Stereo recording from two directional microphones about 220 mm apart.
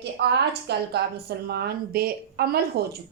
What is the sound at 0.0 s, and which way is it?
Speech, 50° right (ahead or behind).